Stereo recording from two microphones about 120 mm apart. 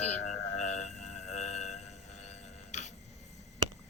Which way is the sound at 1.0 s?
70° left (ahead or behind).